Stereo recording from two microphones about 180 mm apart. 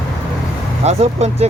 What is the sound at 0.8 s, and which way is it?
Speech, 35° right (ahead or behind).